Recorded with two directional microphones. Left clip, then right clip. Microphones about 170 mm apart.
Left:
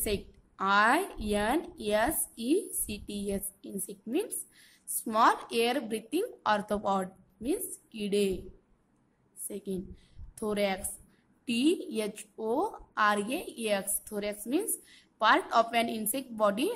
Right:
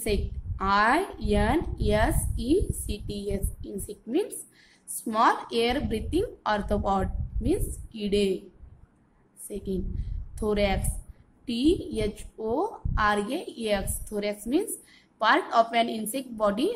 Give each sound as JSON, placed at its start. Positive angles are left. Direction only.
{"t": 0.0, "sound": "a woman's voice", "side_deg": 20}
{"t": 9.5, "sound": "a woman's voice", "side_deg": 15}